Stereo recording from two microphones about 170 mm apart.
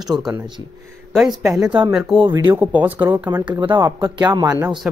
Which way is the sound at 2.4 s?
10° right (ahead or behind).